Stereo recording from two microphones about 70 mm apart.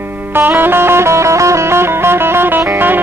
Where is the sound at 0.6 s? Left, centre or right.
Right.